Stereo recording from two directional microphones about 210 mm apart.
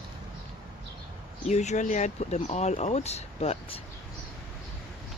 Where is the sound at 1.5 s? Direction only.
35° left (ahead or behind).